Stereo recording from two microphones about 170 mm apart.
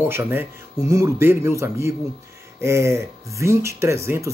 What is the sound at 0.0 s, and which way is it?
Speech, 10° right (ahead or behind).